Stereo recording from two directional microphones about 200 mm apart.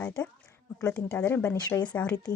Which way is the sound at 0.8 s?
15° left (ahead or behind).